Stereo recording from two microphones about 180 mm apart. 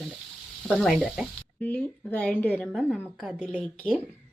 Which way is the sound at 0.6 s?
5° left (ahead or behind).